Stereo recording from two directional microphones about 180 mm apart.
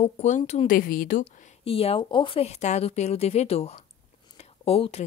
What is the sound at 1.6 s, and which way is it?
Speech, 30° left (ahead or behind).